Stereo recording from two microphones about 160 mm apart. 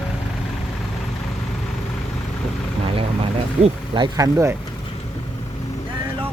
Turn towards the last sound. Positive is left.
turn(degrees=-20)  # may be behind; listen again after turning